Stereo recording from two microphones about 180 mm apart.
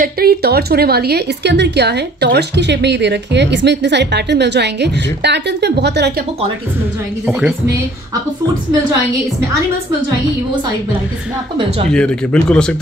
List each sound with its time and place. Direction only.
0.0 s a woman's voice: 55° right (ahead or behind)
7.2 s speech: 5° right (ahead or behind)
11.9 s speech: 5° left (ahead or behind)